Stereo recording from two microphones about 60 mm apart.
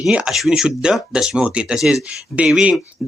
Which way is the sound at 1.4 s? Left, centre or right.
Centre.